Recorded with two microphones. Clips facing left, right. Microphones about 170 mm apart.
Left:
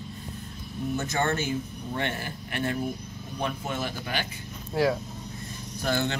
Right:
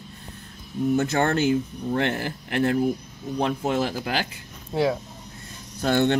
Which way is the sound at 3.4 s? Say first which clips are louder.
Right 7 dB; 90° right.